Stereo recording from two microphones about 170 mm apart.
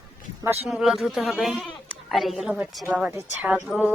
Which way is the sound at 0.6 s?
Centre (ahead or behind).